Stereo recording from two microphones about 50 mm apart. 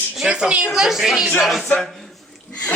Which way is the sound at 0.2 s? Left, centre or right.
Right.